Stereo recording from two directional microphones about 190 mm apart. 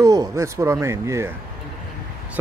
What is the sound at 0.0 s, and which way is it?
Speech, 15° right (ahead or behind).